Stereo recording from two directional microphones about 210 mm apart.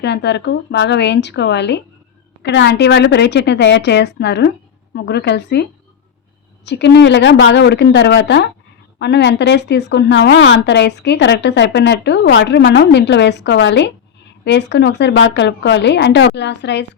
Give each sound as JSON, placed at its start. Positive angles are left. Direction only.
{"t": 0.0, "sound": "a woman's voice", "side_deg": 55}
{"t": 6.7, "sound": "a woman's voice", "side_deg": 55}